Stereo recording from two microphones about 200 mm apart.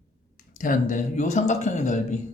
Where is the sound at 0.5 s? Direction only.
40° left (ahead or behind).